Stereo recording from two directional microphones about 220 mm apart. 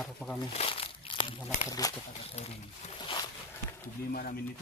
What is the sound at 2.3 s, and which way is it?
Speech, 30° left (ahead or behind).